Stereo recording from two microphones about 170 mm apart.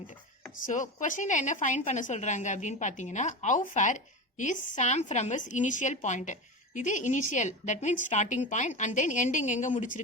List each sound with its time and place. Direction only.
0.6 s a woman's voice: 45° left (ahead or behind)